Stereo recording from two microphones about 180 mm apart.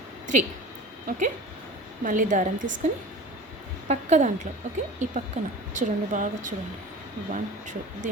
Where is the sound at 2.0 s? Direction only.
45° right (ahead or behind).